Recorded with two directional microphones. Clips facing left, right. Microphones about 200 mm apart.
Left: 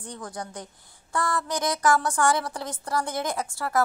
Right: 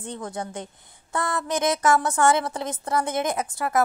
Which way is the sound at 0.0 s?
25° right (ahead or behind).